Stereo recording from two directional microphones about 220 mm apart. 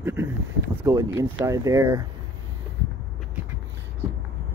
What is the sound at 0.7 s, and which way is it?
Speech, 10° right (ahead or behind).